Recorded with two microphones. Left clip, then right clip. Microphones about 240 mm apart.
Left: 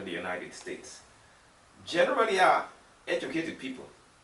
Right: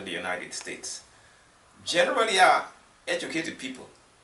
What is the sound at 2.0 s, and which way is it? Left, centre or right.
Speech, centre.